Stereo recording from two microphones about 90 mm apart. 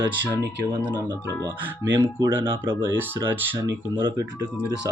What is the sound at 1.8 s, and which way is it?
Speech, 30° right (ahead or behind).